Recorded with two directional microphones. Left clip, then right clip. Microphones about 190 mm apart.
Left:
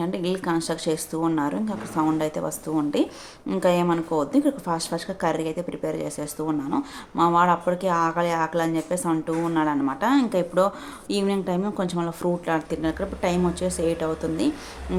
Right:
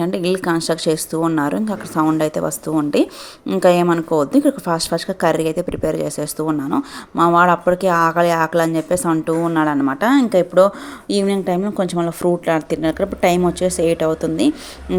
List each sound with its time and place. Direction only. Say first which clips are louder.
0.0 s speech: right 7 dB; 35° right (ahead or behind)